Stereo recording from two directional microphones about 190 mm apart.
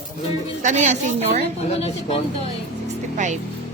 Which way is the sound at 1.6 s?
35° left (ahead or behind).